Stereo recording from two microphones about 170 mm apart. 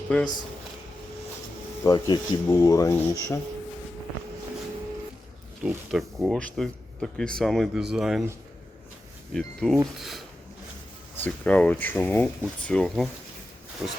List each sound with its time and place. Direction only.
0.1 s speech: 5° left (ahead or behind)
1.8 s speech: 25° left (ahead or behind)
5.6 s speech: 5° right (ahead or behind)
9.3 s speech: centre (ahead or behind)